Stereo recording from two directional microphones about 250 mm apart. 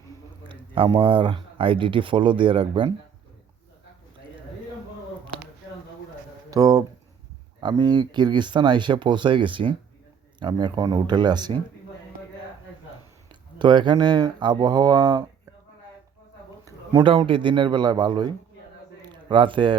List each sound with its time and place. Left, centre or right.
0.4 s speech: centre
6.5 s speech: centre
13.6 s speech: centre
16.9 s speech: centre